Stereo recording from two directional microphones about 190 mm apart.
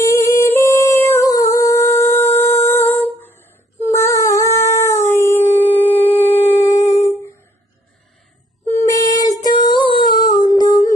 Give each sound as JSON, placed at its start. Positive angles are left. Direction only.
{"t": 0.0, "sound": "music", "side_deg": 15}
{"t": 3.8, "sound": "dog", "side_deg": 15}
{"t": 8.7, "sound": "female singing", "side_deg": 20}